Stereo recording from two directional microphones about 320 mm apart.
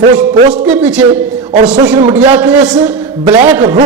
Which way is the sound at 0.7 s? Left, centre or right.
Centre.